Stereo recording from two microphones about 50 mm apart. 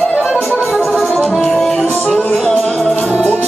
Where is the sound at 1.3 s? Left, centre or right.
Centre.